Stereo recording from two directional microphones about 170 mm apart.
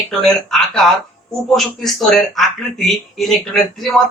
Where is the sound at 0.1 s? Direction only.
5° left (ahead or behind).